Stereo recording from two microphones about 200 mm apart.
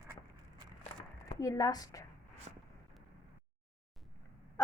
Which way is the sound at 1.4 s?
20° left (ahead or behind).